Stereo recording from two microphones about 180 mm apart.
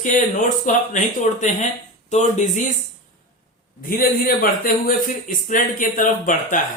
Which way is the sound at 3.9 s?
55° left (ahead or behind).